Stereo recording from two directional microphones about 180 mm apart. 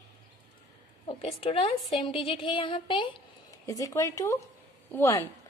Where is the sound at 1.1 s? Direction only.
30° left (ahead or behind).